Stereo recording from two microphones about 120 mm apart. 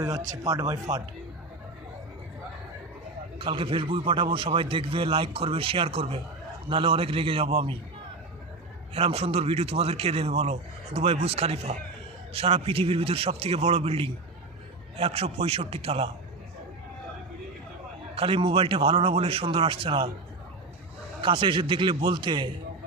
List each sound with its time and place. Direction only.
0.0 s speech: 30° right (ahead or behind)
3.3 s speech: 45° right (ahead or behind)
9.0 s a man's voice: 55° right (ahead or behind)
18.1 s speech: 50° right (ahead or behind)
21.2 s speech: 45° right (ahead or behind)